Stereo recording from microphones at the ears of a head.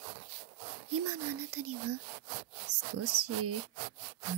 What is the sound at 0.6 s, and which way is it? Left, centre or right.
Speech, right.